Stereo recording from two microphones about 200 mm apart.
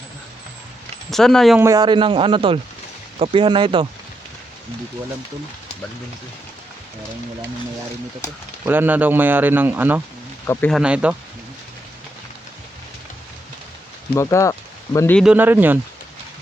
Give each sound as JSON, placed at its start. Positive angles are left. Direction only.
{"t": 1.1, "sound": "speech", "side_deg": 0}
{"t": 1.5, "sound": "a man's voice", "side_deg": -15}
{"t": 8.6, "sound": "speech", "side_deg": -10}
{"t": 10.4, "sound": "speech", "side_deg": 10}
{"t": 10.7, "sound": "speech", "side_deg": -5}
{"t": 14.2, "sound": "speech", "side_deg": 15}
{"t": 15.2, "sound": "speech", "side_deg": -5}